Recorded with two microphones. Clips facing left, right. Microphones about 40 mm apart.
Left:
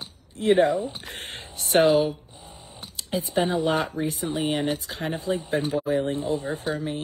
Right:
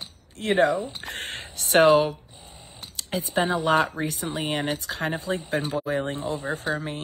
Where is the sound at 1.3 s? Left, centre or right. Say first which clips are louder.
Right 1 dB; right.